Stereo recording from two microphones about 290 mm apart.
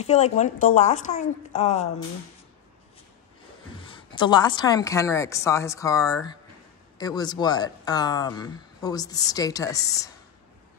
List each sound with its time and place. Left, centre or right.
0.0 s a woman's voice: left
3.9 s speech: centre